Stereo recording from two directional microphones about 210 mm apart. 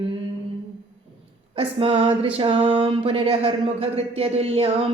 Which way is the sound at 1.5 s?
30° right (ahead or behind).